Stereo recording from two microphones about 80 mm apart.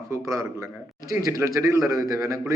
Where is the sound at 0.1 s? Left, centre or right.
Right.